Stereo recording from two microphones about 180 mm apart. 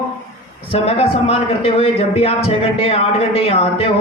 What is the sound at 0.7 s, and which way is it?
A man's voice, 30° left (ahead or behind).